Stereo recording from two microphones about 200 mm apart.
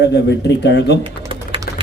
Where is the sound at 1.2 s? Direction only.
25° right (ahead or behind).